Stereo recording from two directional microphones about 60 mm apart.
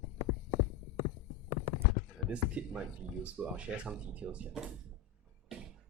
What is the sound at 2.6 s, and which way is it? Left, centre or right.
Speech, centre.